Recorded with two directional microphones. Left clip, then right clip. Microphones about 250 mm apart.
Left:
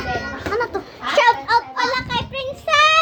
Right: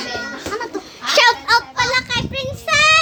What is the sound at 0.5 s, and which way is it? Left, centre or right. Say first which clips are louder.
Chicken: left 5 dB; centre.